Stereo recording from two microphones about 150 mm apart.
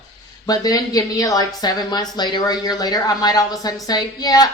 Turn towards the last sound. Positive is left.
turn(degrees=25)  # may be behind; listen again after turning